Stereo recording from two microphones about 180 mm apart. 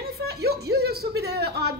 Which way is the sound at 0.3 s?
60° right (ahead or behind).